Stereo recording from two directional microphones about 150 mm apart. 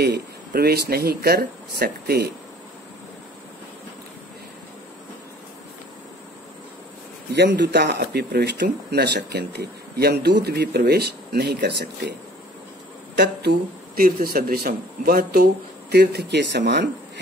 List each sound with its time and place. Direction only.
0.0 s speech: 90° right
7.4 s speech: 90° right
13.9 s speech: 80° right